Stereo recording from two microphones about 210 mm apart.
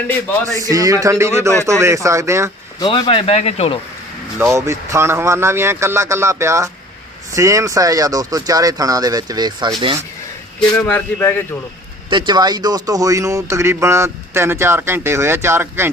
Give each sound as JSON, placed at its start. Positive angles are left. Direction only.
{"t": 0.6, "sound": "a man's voice", "side_deg": -15}
{"t": 2.8, "sound": "speech", "side_deg": 25}
{"t": 4.5, "sound": "a man's voice", "side_deg": -15}
{"t": 10.8, "sound": "speech", "side_deg": 5}
{"t": 12.1, "sound": "a man's voice", "side_deg": -20}